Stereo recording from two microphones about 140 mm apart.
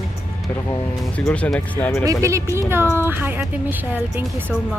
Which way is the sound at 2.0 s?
20° right (ahead or behind).